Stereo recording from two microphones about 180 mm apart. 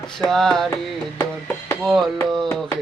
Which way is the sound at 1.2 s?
15° left (ahead or behind).